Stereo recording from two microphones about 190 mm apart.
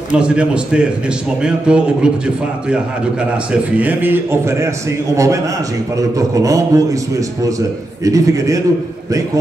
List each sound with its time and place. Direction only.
0.1 s a man's voice: 5° right (ahead or behind)